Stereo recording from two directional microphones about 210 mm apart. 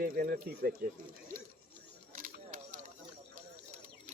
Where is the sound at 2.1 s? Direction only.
40° right (ahead or behind).